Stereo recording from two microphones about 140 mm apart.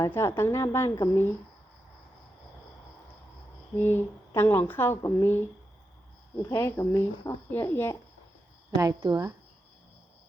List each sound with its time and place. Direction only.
0.0 s a woman's voice: 20° left (ahead or behind)
3.8 s speech: 15° left (ahead or behind)
8.8 s a woman's voice: 25° right (ahead or behind)